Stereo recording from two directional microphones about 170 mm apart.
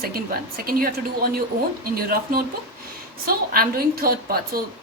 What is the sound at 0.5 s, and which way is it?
A woman's voice, 60° right (ahead or behind).